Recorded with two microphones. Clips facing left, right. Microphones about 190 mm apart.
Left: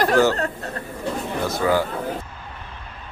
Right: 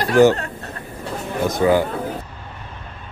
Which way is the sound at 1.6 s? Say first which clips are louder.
Right 5 dB; 25° right (ahead or behind).